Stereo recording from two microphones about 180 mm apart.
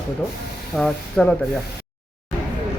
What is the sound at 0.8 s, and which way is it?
Speech, 5° left (ahead or behind).